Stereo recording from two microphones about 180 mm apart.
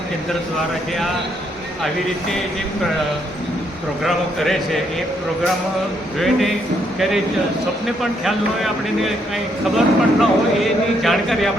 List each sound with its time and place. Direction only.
4.0 s speech: centre (ahead or behind)
6.1 s speech: centre (ahead or behind)
7.9 s speech: centre (ahead or behind)